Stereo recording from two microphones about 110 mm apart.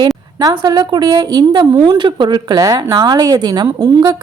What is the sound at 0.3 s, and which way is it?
A woman's voice, 35° right (ahead or behind).